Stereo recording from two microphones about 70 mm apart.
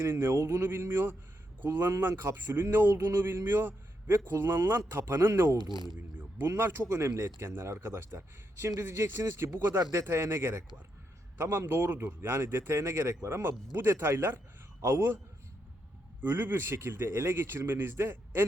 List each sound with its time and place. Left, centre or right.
0.0 s speech: right
5.7 s speech: left
6.6 s speech: right
16.2 s speech: right